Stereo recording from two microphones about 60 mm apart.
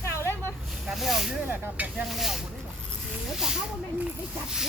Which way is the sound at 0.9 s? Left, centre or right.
Centre.